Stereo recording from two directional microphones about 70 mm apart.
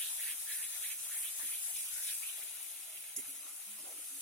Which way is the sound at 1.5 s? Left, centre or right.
Centre.